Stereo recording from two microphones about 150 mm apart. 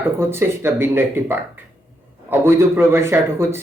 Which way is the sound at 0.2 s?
15° right (ahead or behind).